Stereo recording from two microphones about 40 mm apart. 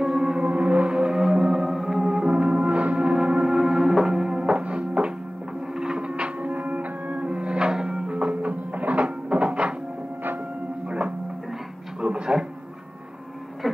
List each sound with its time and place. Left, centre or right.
0.0 s music: centre
0.4 s music: right
3.4 s music: centre
4.6 s music: right
8.1 s music: right
10.9 s music: right
12.0 s a sound: right